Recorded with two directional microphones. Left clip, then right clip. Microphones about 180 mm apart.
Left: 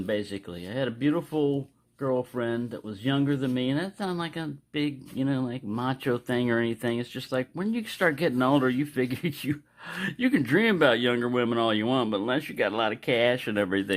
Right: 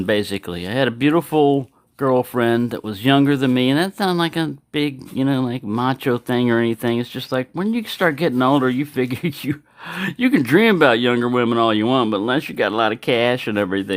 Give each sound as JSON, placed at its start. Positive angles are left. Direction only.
{"t": 0.0, "sound": "speech", "side_deg": -50}